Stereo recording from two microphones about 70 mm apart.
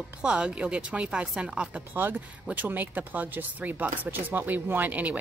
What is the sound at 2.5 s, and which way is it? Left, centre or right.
Speech, right.